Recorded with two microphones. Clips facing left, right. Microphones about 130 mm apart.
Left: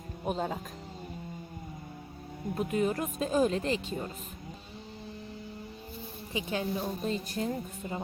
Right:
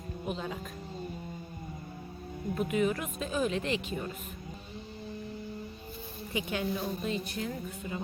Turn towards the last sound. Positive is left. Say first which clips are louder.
# left 2 dB
turn(degrees=35)  # may be behind; listen again after turning